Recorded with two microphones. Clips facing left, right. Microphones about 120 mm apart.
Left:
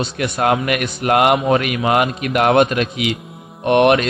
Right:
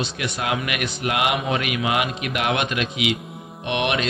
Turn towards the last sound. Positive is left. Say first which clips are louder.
# left 10 dB
turn(degrees=50)  # may be behind; listen again after turning